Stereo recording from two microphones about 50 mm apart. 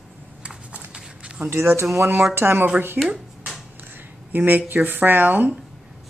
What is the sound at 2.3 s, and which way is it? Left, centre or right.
Speech, right.